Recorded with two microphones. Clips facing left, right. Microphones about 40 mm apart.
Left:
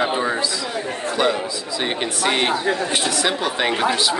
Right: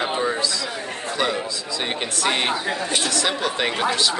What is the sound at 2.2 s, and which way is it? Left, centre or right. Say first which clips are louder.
Speech: left 2 dB; centre.